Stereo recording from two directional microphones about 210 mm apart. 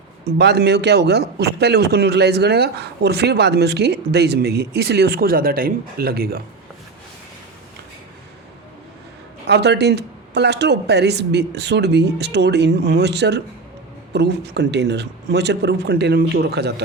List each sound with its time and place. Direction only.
0.3 s a man's voice: 50° right (ahead or behind)
9.5 s a man's voice: 55° right (ahead or behind)